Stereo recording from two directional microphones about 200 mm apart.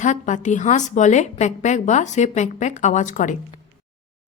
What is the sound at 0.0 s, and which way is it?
A woman's voice, 40° left (ahead or behind).